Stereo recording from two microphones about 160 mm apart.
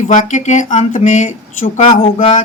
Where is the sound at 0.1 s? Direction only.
50° left (ahead or behind).